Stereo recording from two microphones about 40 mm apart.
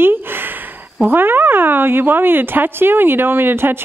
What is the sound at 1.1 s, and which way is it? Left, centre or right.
Speech, right.